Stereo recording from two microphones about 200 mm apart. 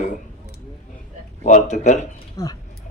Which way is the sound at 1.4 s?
35° left (ahead or behind).